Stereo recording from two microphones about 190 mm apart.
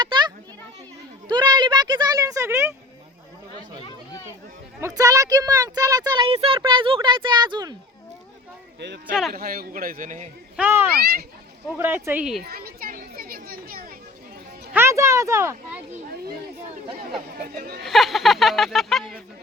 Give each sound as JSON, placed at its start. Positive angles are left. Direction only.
{"t": 0.0, "sound": "children playing", "side_deg": -25}
{"t": 1.3, "sound": "a sound", "side_deg": -20}
{"t": 4.9, "sound": "speech", "side_deg": -20}
{"t": 9.3, "sound": "a man's voice", "side_deg": -50}
{"t": 10.6, "sound": "speech", "side_deg": -10}
{"t": 11.0, "sound": "a child's voice", "side_deg": -55}
{"t": 11.8, "sound": "speech", "side_deg": -10}
{"t": 12.5, "sound": "chatter", "side_deg": -50}
{"t": 14.7, "sound": "speech", "side_deg": -15}
{"t": 17.3, "sound": "a man's voice", "side_deg": -50}
{"t": 17.8, "sound": "speech", "side_deg": 0}